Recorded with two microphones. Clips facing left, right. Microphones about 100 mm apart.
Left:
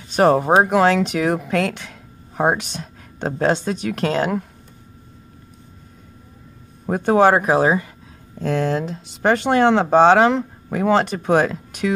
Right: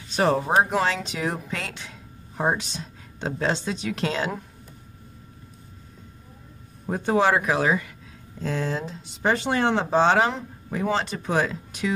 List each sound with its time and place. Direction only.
0.1 s speech: 50° left (ahead or behind)
0.5 s speech: 80° left; by 4.5 s 55° left (ahead or behind)
6.9 s speech: 55° left (ahead or behind); by 7.9 s 35° left (ahead or behind)
8.4 s speech: 65° left (ahead or behind)